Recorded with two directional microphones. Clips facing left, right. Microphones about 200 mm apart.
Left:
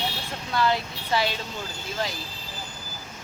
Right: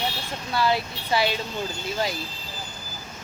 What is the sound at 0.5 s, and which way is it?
Speech, 10° right (ahead or behind).